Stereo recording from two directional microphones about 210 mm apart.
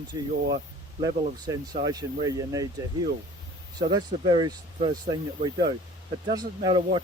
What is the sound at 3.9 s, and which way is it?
Speech, 20° right (ahead or behind).